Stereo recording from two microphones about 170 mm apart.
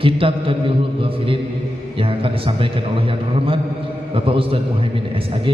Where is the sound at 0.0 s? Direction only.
30° right (ahead or behind).